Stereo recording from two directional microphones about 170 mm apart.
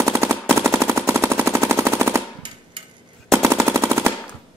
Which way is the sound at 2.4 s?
30° right (ahead or behind).